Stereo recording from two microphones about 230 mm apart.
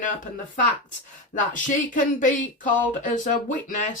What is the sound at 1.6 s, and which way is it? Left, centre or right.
Speech, left.